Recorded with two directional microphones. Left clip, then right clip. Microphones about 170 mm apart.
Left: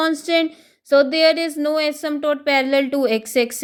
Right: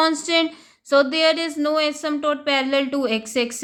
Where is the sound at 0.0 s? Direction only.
20° left (ahead or behind).